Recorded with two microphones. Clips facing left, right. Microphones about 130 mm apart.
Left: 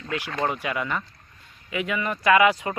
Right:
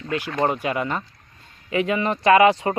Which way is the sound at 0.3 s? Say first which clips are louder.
Right 4 dB; 25° right (ahead or behind).